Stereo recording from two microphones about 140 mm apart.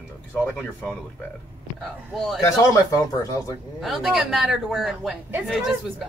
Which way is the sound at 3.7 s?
Centre (ahead or behind).